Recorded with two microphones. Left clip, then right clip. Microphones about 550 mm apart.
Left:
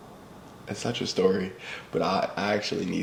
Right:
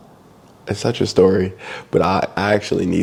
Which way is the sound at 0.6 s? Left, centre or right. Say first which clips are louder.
Right 11 dB; right.